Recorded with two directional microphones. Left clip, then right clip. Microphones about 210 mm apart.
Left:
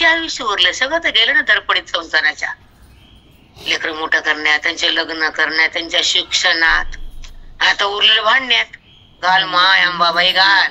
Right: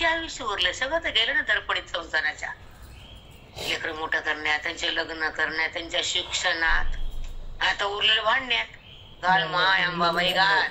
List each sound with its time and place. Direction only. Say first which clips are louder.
0.0 s a man's voice: left 11 dB; 40° left (ahead or behind)
3.6 s a man's voice: left 10 dB; 40° left (ahead or behind)